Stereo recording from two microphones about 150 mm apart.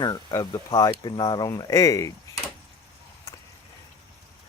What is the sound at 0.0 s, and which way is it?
Speech, 30° left (ahead or behind).